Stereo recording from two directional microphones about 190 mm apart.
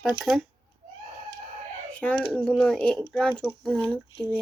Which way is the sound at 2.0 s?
5° left (ahead or behind).